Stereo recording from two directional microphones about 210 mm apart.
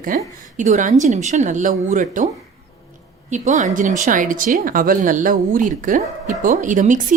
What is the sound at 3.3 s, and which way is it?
Speech, 35° right (ahead or behind).